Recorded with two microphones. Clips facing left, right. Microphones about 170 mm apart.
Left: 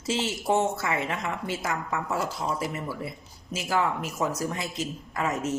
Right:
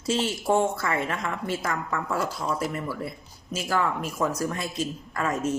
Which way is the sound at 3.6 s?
25° left (ahead or behind).